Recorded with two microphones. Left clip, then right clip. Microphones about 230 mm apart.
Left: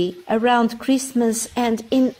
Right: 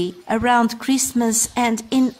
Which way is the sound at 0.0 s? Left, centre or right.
Centre.